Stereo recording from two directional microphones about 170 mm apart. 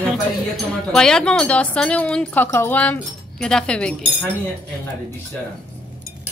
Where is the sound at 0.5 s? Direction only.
5° left (ahead or behind).